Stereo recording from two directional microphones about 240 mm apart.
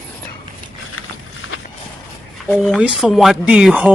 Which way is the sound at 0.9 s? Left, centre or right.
Left.